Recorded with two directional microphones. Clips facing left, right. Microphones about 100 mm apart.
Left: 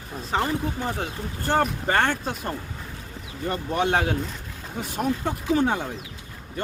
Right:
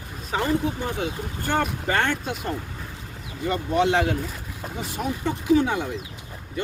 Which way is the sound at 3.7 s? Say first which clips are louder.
Right 2 dB; 50° left (ahead or behind).